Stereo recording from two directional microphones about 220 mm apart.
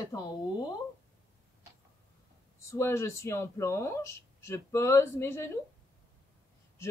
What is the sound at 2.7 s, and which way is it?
Speech, 15° left (ahead or behind).